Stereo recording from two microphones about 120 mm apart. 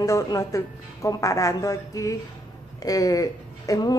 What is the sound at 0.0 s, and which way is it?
A woman's voice, 25° left (ahead or behind).